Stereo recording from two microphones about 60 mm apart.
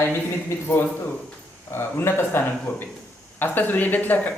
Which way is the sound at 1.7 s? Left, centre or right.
Left.